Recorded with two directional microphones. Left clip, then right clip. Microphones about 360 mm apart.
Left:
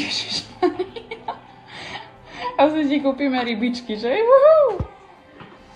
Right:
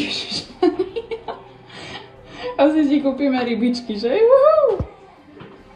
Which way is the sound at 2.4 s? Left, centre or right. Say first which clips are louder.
Even; left.